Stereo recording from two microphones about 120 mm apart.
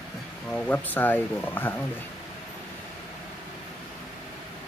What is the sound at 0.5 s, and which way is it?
Speech, 10° left (ahead or behind).